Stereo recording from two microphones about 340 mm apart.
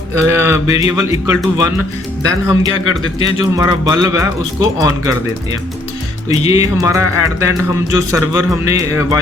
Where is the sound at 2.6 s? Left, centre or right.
Left.